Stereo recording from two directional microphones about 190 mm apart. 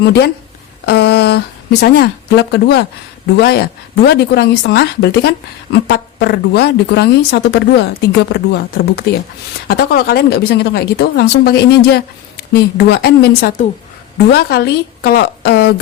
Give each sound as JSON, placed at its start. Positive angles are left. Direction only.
{"t": 0.0, "sound": "speech", "side_deg": 60}